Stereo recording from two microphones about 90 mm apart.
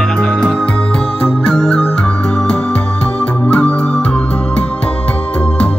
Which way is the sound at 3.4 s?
15° left (ahead or behind).